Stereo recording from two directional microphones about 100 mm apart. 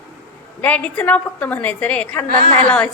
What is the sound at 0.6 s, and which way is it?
A woman's voice, 15° left (ahead or behind).